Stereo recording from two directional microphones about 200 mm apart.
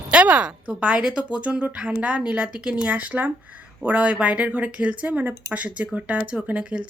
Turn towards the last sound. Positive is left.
turn(degrees=-5)  # may be behind; listen again after turning